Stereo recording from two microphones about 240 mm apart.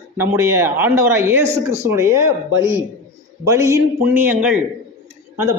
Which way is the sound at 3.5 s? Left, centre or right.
Centre.